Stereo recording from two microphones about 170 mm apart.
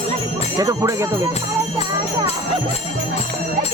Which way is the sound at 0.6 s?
20° right (ahead or behind).